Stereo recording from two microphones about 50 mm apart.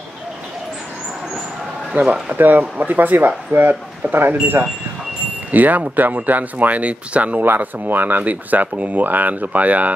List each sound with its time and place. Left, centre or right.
2.0 s speech: centre
2.3 s speech: right
7.4 s speech: right